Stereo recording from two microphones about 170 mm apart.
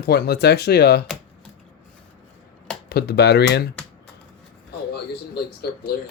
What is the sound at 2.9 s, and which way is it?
Speech, 70° left (ahead or behind).